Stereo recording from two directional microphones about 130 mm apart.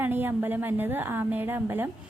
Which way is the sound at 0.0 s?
15° right (ahead or behind).